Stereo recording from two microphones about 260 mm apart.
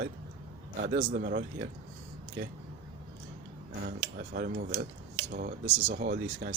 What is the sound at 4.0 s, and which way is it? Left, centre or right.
Speech, right.